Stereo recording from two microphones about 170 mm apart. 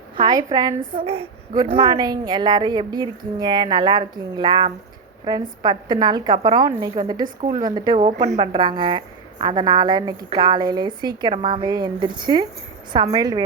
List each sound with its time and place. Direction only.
0.2 s a woman's voice: 25° right (ahead or behind)
8.0 s speech: 40° right (ahead or behind)
8.4 s a woman's voice: 25° right (ahead or behind)